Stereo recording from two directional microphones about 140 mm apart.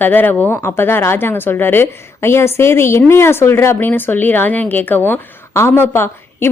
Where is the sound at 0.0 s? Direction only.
15° left (ahead or behind).